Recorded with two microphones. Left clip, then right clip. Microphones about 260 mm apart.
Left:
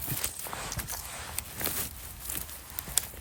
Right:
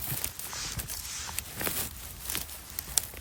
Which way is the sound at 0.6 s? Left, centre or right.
Centre.